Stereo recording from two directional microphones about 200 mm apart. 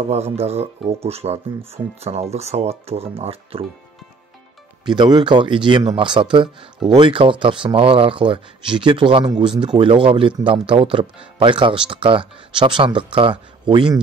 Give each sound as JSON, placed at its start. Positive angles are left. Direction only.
{"t": 0.1, "sound": "speech", "side_deg": -30}
{"t": 4.8, "sound": "speech", "side_deg": -20}